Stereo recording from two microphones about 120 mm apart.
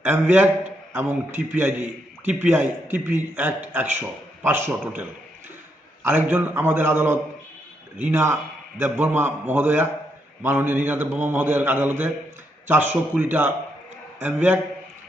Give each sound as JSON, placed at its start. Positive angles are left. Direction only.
{"t": 0.0, "sound": "a man's voice", "side_deg": -15}
{"t": 6.0, "sound": "a man's voice", "side_deg": -15}